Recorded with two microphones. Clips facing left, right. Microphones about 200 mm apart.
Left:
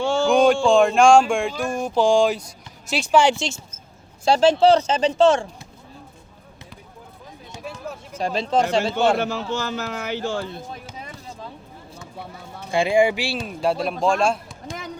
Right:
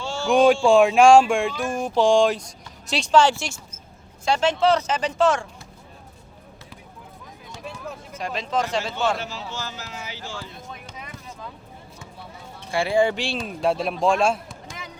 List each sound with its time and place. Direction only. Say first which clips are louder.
0.0 s a sound: left 9 dB; 55° left (ahead or behind)
0.3 s a sound: right 1 dB; centre (ahead or behind)
2.9 s speech: left 1 dB; 10° left (ahead or behind)
4.3 s speech: left 5 dB; 30° left (ahead or behind)
8.2 s speech: left 5 dB; 30° left (ahead or behind)
9.1 s speech: left 8 dB; 55° left (ahead or behind)
10.5 s speech: left 5 dB; 30° left (ahead or behind)
10.9 s basketball bounce: left 2 dB; 30° left (ahead or behind)
12.7 s a sound: left 2 dB; 15° left (ahead or behind); by 14.4 s 5° right (ahead or behind)